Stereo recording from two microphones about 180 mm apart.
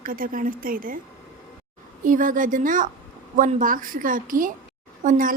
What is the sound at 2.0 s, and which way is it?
Speech, 45° right (ahead or behind).